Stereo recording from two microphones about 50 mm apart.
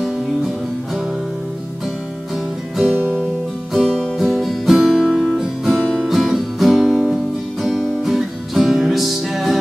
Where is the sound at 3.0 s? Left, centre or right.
Right.